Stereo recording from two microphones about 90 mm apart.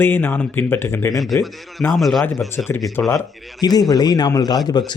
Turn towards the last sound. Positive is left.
turn(degrees=55)  # may be behind; listen again after turning